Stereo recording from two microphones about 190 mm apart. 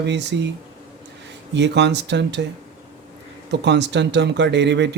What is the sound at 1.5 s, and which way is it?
Speech, 65° right (ahead or behind).